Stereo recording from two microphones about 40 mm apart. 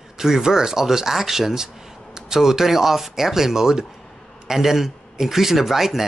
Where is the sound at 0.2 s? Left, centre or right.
Centre.